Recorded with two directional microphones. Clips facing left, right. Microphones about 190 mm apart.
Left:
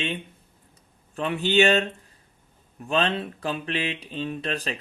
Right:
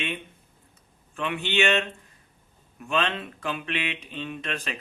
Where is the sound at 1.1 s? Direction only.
35° left (ahead or behind).